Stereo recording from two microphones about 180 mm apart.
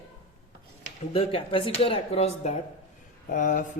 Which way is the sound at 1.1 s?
30° left (ahead or behind).